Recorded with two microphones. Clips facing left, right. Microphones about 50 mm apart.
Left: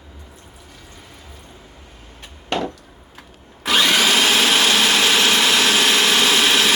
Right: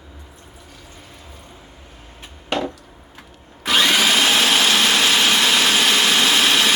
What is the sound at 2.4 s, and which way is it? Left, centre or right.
Chop, centre.